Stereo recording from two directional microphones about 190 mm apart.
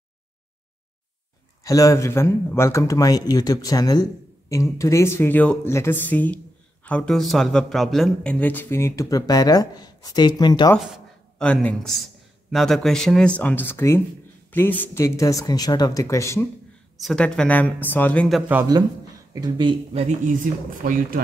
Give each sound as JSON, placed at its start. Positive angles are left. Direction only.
{"t": 1.6, "sound": "speech", "side_deg": 15}
{"t": 10.9, "sound": "speech", "side_deg": 5}
{"t": 17.0, "sound": "speech", "side_deg": 5}
{"t": 18.5, "sound": "speech", "side_deg": -15}
{"t": 20.7, "sound": "speech", "side_deg": -45}